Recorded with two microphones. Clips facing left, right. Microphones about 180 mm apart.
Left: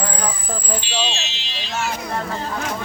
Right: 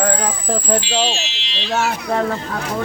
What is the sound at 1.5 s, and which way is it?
Speech, 70° right (ahead or behind).